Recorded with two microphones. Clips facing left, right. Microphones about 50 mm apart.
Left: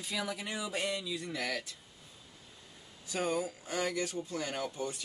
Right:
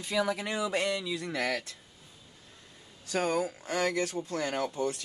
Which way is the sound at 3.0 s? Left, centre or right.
Right.